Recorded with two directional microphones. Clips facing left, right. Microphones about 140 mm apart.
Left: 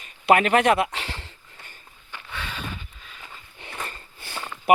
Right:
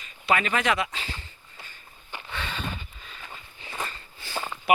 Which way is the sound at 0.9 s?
75° left (ahead or behind).